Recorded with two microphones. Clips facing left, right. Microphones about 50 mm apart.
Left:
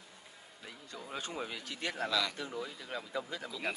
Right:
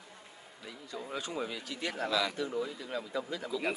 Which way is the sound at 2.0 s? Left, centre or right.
Centre.